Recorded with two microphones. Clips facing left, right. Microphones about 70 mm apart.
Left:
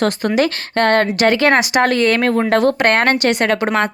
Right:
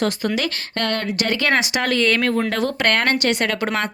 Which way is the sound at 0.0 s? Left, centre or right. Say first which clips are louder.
Left 6 dB; left.